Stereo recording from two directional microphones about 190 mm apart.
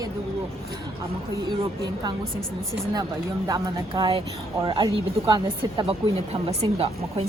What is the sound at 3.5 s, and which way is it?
A woman's voice, 20° right (ahead or behind).